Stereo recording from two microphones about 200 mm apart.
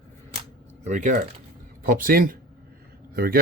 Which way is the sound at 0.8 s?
40° right (ahead or behind).